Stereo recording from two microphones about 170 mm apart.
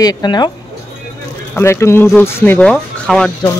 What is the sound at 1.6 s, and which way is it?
Speech, 15° left (ahead or behind).